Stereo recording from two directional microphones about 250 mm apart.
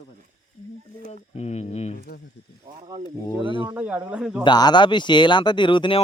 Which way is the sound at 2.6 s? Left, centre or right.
Centre.